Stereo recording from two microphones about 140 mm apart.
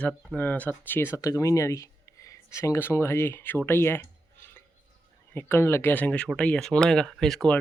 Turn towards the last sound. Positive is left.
turn(degrees=5)  # may be behind; listen again after turning